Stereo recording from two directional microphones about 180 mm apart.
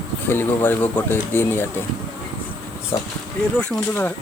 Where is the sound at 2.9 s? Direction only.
15° left (ahead or behind).